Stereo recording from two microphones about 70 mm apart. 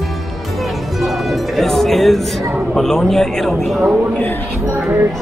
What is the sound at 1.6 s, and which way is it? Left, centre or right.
Music, centre.